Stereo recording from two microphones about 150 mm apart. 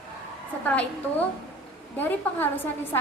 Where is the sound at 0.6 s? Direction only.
10° left (ahead or behind).